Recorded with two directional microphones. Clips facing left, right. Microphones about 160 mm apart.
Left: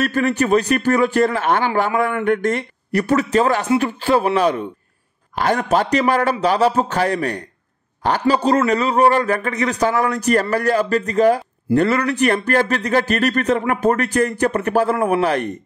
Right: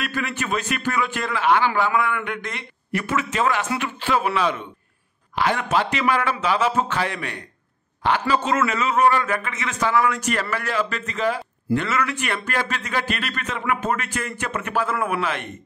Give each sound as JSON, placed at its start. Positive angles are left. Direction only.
{"t": 0.0, "sound": "a man's voice", "side_deg": 40}